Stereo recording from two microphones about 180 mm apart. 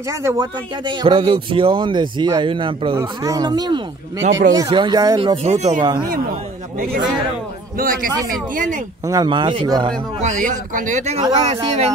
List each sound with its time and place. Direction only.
0.1 s a man's voice: 15° right (ahead or behind)
5.4 s speech: 40° right (ahead or behind)
5.8 s a man's voice: 25° right (ahead or behind)
7.7 s speech: 50° right (ahead or behind)
9.0 s a man's voice: 20° right (ahead or behind)
10.2 s speech: 45° right (ahead or behind)